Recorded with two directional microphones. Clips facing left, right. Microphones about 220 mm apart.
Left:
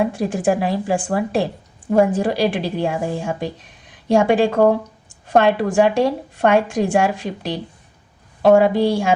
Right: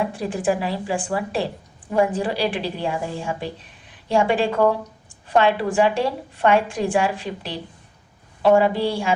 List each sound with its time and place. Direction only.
0.2 s speech: 45° left (ahead or behind)